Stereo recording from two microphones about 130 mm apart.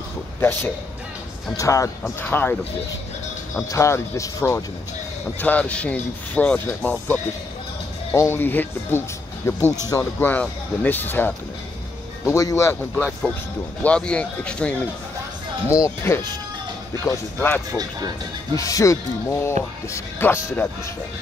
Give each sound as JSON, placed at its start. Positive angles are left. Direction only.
{"t": 0.4, "sound": "speech", "side_deg": 15}
{"t": 3.5, "sound": "speech", "side_deg": 25}
{"t": 5.4, "sound": "speech", "side_deg": 10}
{"t": 12.9, "sound": "speech", "side_deg": 10}
{"t": 15.7, "sound": "speech", "side_deg": 20}
{"t": 17.7, "sound": "speech", "side_deg": -30}
{"t": 18.6, "sound": "speech", "side_deg": 25}